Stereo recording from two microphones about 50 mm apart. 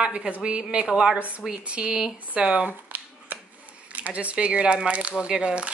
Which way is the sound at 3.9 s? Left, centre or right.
Right.